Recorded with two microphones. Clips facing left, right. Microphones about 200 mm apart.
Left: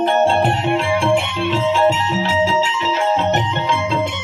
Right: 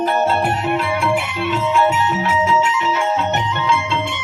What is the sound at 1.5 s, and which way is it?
Music, 30° left (ahead or behind).